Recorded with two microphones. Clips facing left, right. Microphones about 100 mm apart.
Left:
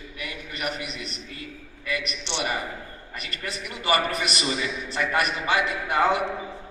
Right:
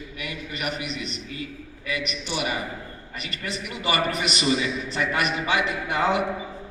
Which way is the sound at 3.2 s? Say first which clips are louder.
Right 2 dB; 40° left (ahead or behind).